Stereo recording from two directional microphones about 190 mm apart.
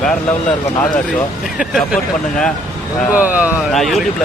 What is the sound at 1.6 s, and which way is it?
Speech, centre (ahead or behind).